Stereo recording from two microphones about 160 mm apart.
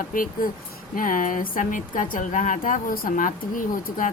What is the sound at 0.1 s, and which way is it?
A woman's voice, 60° left (ahead or behind).